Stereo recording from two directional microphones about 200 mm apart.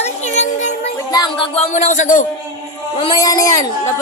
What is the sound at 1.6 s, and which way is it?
Speech, 35° left (ahead or behind).